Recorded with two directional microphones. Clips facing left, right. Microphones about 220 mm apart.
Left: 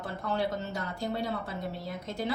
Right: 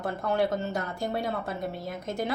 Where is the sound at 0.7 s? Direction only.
50° right (ahead or behind).